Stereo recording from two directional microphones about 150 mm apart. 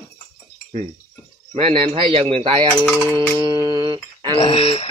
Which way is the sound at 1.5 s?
40° right (ahead or behind).